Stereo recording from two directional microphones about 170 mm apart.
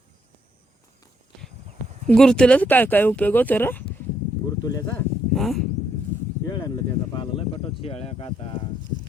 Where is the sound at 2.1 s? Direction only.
5° left (ahead or behind).